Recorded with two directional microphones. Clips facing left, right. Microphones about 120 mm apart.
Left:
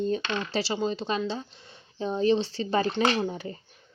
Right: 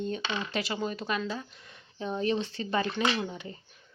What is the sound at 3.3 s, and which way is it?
Speech, 35° left (ahead or behind).